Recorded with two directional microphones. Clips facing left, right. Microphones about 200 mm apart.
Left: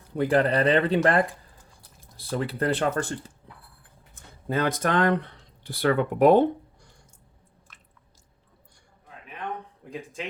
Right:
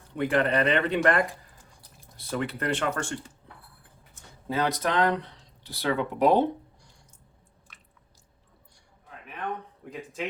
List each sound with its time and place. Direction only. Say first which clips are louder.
0.2 s speech: left 3 dB; 35° left (ahead or behind)
4.1 s speech: left 3 dB; 55° left (ahead or behind)
7.7 s chewing: right 1 dB; centre (ahead or behind)